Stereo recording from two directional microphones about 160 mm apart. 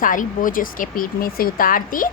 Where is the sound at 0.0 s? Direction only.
55° left (ahead or behind).